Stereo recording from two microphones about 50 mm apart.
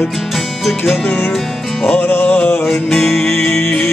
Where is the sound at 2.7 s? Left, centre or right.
Centre.